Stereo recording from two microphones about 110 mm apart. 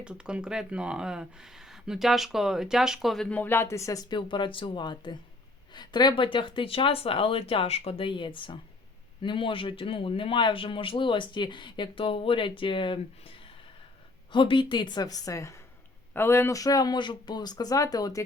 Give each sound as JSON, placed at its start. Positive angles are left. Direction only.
{"t": 0.0, "sound": "speech", "side_deg": -10}
{"t": 3.2, "sound": "speech", "side_deg": 15}
{"t": 4.1, "sound": "speech", "side_deg": 45}
{"t": 14.3, "sound": "speech", "side_deg": 50}